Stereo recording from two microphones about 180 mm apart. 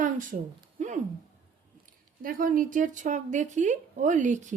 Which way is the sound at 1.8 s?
50° right (ahead or behind).